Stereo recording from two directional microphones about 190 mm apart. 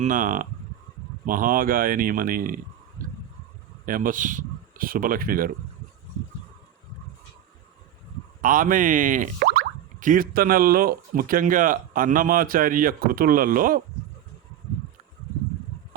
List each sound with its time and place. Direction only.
0.0 s speech: 45° right (ahead or behind)
3.0 s a sound: 45° right (ahead or behind)
3.8 s a man's voice: 45° right (ahead or behind)
8.4 s speech: 45° right (ahead or behind)